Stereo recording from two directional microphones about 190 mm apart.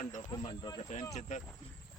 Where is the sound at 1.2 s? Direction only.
40° left (ahead or behind).